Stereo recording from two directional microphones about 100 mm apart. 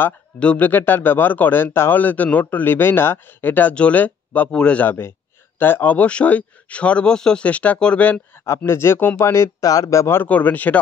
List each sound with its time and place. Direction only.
0.0 s speech: 15° left (ahead or behind)
8.5 s speech: 25° left (ahead or behind)